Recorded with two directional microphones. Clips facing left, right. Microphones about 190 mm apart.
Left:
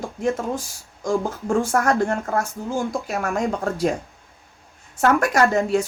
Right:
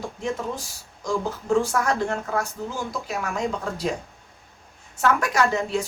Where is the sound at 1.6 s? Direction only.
50° left (ahead or behind).